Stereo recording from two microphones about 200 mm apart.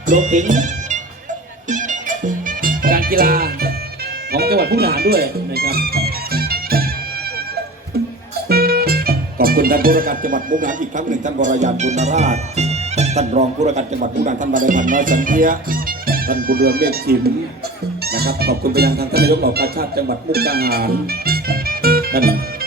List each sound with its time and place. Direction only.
0.1 s speech: 40° right (ahead or behind)
1.7 s music: 40° right (ahead or behind)
8.4 s speech: 50° right (ahead or behind)